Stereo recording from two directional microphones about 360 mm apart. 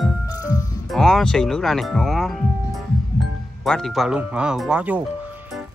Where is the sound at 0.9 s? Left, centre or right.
Centre.